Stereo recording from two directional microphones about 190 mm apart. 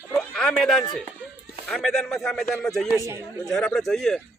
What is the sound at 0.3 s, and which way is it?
Speech, 5° left (ahead or behind).